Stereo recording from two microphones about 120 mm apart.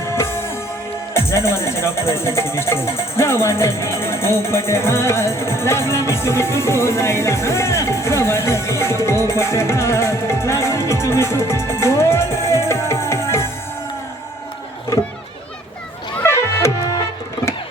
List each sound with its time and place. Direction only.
0.0 s music: 20° left (ahead or behind)
1.1 s speech: 20° left (ahead or behind)
8.8 s music: 20° left (ahead or behind)
16.2 s music: 20° left (ahead or behind)